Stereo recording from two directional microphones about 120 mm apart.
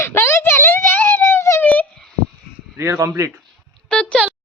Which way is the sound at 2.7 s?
25° right (ahead or behind).